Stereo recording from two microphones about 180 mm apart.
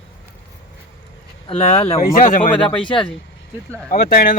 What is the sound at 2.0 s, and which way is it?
Speech, 50° left (ahead or behind).